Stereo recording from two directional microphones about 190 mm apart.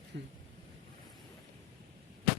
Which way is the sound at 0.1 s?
60° right (ahead or behind).